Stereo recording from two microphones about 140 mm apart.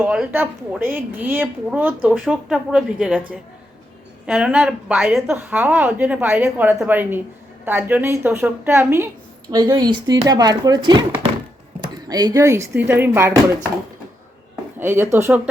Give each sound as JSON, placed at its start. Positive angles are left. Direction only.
{"t": 0.0, "sound": "a woman's voice", "side_deg": -10}
{"t": 4.3, "sound": "speech", "side_deg": -5}
{"t": 5.2, "sound": "a woman's voice", "side_deg": -15}
{"t": 9.5, "sound": "speech", "side_deg": -35}
{"t": 12.0, "sound": "speech", "side_deg": -25}
{"t": 14.8, "sound": "a woman's voice", "side_deg": -15}